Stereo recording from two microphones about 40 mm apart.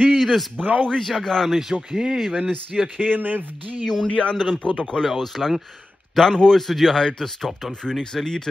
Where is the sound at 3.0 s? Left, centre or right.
Right.